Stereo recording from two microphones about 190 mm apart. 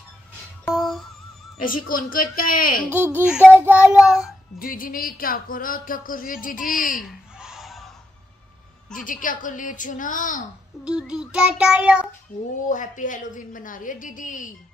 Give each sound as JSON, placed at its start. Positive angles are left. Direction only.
{"t": 0.7, "sound": "music", "side_deg": 0}
{"t": 1.6, "sound": "speech", "side_deg": 45}
{"t": 3.3, "sound": "child singing", "side_deg": 5}
{"t": 3.6, "sound": "child singing", "side_deg": -5}
{"t": 4.6, "sound": "speech", "side_deg": 45}
{"t": 7.0, "sound": "snicker", "side_deg": 0}
{"t": 8.9, "sound": "speech", "side_deg": 45}
{"t": 10.8, "sound": "child singing", "side_deg": -5}
{"t": 12.6, "sound": "speech", "side_deg": 40}